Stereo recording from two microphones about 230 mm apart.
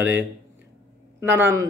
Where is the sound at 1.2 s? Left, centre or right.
Centre.